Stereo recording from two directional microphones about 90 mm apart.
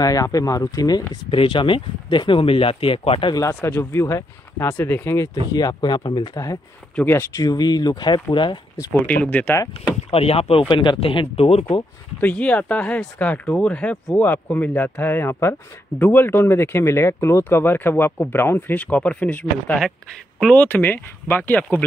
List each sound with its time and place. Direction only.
0.0 s speech: 40° left (ahead or behind)
1.3 s speech: 75° left (ahead or behind)
3.3 s speech: 35° left (ahead or behind)
5.5 s speech: 50° left (ahead or behind)
6.3 s speech: 40° left (ahead or behind)
7.1 s speech: 30° left (ahead or behind)
7.4 s speech: 50° left (ahead or behind)
9.0 s speech: 20° left (ahead or behind)
10.1 s speech: 90° left
12.2 s speech: 15° left (ahead or behind)
20.6 s speech: 20° left (ahead or behind)